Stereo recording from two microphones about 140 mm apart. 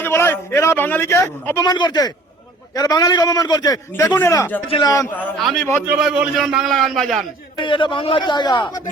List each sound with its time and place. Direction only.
0.0 s a man's voice: 20° left (ahead or behind)
5.4 s a man's voice: centre (ahead or behind)
7.6 s speech: 35° left (ahead or behind)